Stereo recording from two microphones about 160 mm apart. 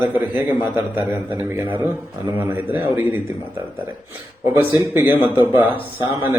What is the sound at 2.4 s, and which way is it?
Speech, 10° right (ahead or behind).